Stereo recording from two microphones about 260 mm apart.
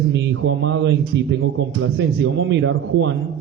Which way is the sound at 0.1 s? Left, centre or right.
Right.